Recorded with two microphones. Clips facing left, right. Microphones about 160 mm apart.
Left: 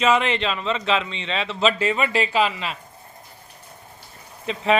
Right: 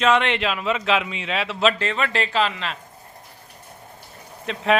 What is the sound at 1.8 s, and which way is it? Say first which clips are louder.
Speech: left 2 dB; 10° left (ahead or behind).